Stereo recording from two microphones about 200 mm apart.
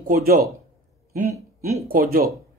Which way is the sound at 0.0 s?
50° right (ahead or behind).